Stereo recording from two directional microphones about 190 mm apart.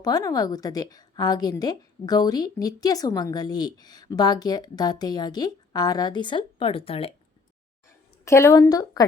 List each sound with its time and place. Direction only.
0.0 s a woman's voice: 20° left (ahead or behind)
8.2 s a woman's voice: 15° left (ahead or behind)